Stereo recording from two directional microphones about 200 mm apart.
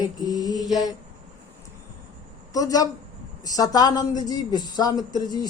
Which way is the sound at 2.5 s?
20° left (ahead or behind).